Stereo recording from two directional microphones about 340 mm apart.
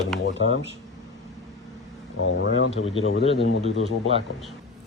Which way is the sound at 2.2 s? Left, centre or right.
Left.